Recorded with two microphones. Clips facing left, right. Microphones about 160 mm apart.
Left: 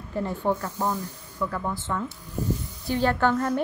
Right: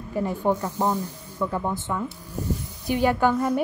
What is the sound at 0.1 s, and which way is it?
Speech, 10° right (ahead or behind).